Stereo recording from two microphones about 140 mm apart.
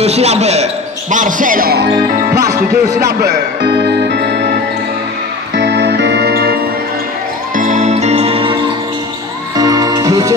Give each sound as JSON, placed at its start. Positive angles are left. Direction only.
{"t": 0.0, "sound": "speech", "side_deg": -50}
{"t": 1.1, "sound": "speech", "side_deg": -70}
{"t": 7.5, "sound": "music", "side_deg": -65}
{"t": 9.6, "sound": "music", "side_deg": -25}